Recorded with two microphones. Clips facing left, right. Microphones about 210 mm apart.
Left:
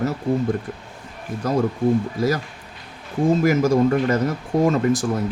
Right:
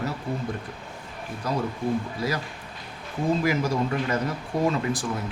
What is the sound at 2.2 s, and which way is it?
Speech, 45° left (ahead or behind).